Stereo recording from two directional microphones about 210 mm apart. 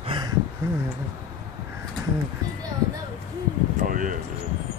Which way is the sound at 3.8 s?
40° right (ahead or behind).